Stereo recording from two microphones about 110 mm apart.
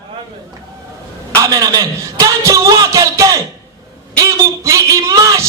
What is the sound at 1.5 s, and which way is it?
A man's voice, 35° right (ahead or behind).